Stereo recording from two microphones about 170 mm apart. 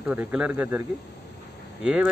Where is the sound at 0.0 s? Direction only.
10° right (ahead or behind).